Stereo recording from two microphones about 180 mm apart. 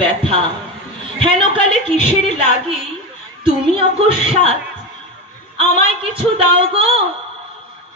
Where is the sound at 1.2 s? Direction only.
30° right (ahead or behind).